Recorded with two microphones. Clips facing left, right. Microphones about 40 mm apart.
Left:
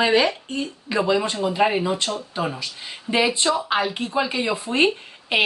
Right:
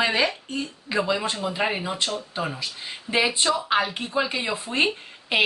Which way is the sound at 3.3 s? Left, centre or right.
Centre.